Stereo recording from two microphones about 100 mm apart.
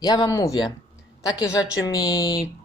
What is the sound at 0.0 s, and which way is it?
Speech, 40° left (ahead or behind).